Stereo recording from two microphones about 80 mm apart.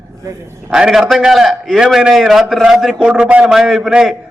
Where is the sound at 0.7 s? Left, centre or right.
Centre.